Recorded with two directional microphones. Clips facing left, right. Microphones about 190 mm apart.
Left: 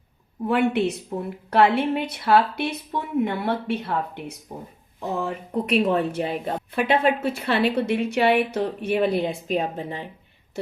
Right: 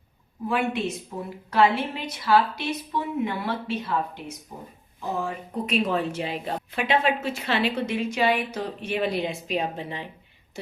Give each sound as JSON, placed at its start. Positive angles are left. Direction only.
{"t": 0.4, "sound": "a woman's voice", "side_deg": 60}